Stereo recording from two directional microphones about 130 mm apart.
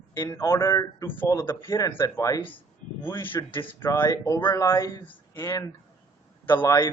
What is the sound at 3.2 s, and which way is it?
Speech, 15° left (ahead or behind).